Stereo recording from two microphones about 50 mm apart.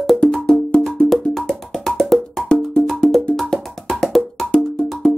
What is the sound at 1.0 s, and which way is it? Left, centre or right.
Music, centre.